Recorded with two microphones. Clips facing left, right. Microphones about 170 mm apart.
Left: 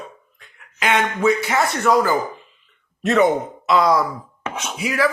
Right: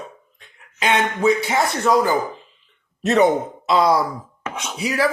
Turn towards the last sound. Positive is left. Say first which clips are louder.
# even
turn(degrees=-35)  # may be behind; listen again after turning